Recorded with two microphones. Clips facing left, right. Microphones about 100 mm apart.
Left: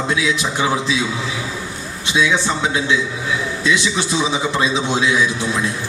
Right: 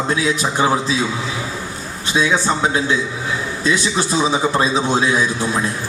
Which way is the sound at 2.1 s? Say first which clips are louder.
Right 1 dB; 40° right (ahead or behind).